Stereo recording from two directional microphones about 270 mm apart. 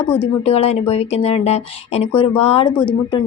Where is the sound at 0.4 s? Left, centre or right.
Left.